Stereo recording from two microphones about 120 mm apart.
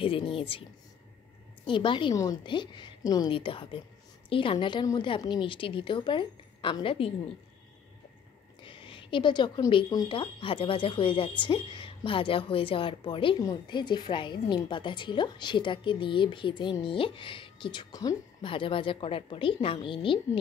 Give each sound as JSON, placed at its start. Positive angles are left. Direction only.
{"t": 0.0, "sound": "speech", "side_deg": 50}
{"t": 1.7, "sound": "a woman's voice", "side_deg": 45}
{"t": 3.3, "sound": "speech", "side_deg": 45}
{"t": 8.5, "sound": "a sound", "side_deg": 45}
{"t": 9.7, "sound": "a woman's voice", "side_deg": 40}